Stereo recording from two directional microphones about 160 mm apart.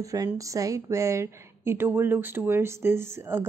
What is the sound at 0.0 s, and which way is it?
A woman's voice, 20° right (ahead or behind).